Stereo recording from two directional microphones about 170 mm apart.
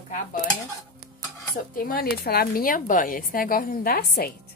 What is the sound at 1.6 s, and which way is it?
Speech, 55° left (ahead or behind).